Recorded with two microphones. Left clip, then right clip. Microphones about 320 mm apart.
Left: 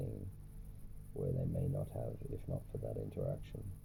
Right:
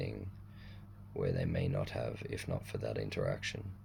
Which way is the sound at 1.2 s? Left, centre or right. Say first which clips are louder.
Right 5 dB; right.